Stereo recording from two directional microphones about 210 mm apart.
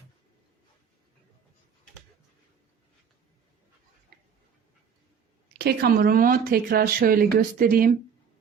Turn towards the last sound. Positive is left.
turn(degrees=-45)  # may be behind; listen again after turning